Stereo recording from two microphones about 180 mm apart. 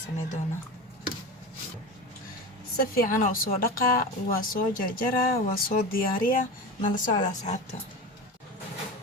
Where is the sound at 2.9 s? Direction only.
50° left (ahead or behind).